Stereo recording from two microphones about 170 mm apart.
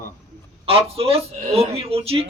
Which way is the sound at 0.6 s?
35° right (ahead or behind).